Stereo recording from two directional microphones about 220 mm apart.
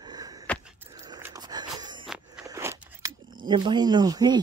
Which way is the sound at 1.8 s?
20° right (ahead or behind).